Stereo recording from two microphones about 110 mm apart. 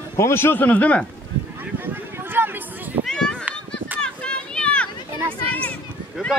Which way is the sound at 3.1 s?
5° left (ahead or behind).